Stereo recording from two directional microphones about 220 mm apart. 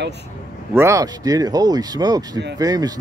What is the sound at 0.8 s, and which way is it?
Speech, 15° right (ahead or behind).